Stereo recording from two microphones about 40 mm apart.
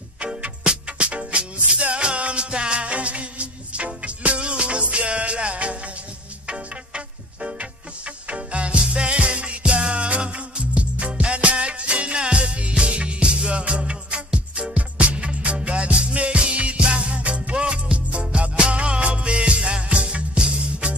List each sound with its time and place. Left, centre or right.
0.2 s music: right
8.3 s music: right